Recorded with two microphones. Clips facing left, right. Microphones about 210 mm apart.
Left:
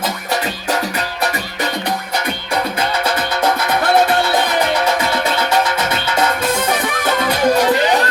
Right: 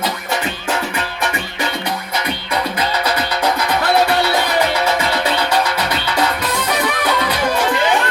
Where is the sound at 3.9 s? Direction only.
50° left (ahead or behind).